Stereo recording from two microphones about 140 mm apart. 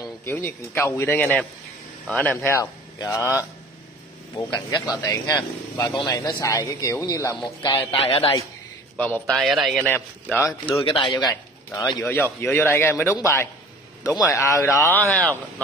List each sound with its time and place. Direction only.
0.0 s a man's voice: 15° left (ahead or behind)
4.5 s a man's voice: 30° left (ahead or behind)
8.9 s a man's voice: 10° left (ahead or behind)
9.3 s a man's voice: centre (ahead or behind)
9.8 s a man's voice: 15° left (ahead or behind)
10.8 s speech: 35° left (ahead or behind)
11.7 s a man's voice: 20° left (ahead or behind)